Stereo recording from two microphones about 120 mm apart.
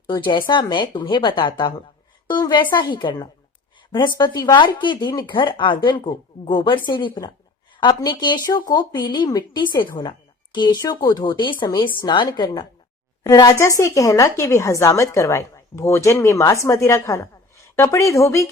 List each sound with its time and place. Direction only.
0.1 s a woman's voice: 40° left (ahead or behind)
13.2 s a woman's voice: 25° left (ahead or behind)